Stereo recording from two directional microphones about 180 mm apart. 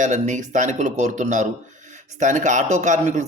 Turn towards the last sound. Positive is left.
turn(degrees=-40)  # may be behind; listen again after turning